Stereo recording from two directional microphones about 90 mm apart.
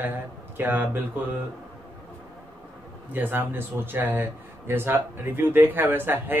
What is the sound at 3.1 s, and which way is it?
Speech, 20° right (ahead or behind).